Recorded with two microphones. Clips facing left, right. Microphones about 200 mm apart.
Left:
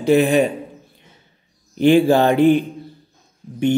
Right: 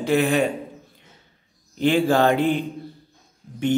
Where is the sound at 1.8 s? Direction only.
15° left (ahead or behind).